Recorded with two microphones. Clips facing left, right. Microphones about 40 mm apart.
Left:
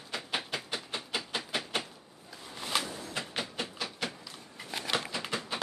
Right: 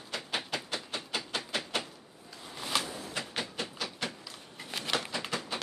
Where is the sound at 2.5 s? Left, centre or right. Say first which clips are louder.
Even; centre.